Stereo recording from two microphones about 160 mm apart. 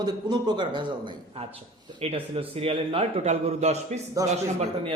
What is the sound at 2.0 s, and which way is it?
A man's voice, 40° right (ahead or behind).